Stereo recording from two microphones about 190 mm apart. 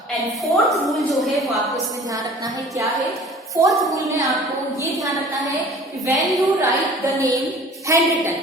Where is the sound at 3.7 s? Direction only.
Centre (ahead or behind).